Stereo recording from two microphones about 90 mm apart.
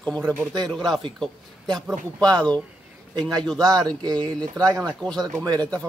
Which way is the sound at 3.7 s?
45° right (ahead or behind).